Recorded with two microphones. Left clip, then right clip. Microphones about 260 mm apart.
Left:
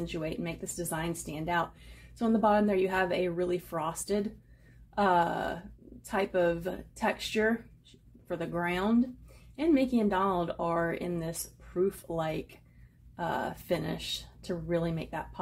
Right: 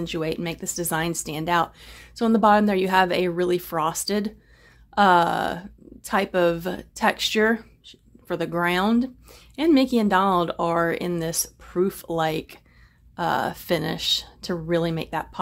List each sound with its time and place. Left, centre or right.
0.0 s speech: right